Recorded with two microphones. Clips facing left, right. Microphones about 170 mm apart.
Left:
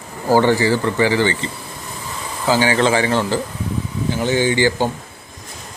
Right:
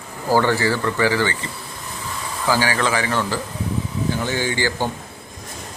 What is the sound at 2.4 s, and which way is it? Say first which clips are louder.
Speech: left 4 dB; 20° left (ahead or behind).